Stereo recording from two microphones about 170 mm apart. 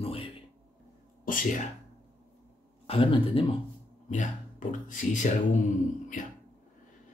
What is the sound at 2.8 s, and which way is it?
Speech, 30° left (ahead or behind).